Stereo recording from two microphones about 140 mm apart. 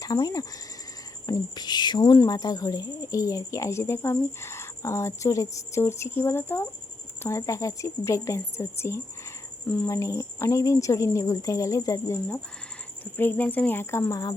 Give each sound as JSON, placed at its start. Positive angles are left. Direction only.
{"t": 0.0, "sound": "a woman's voice", "side_deg": 25}
{"t": 9.6, "sound": "speech", "side_deg": 5}
{"t": 9.9, "sound": "a woman's voice", "side_deg": 20}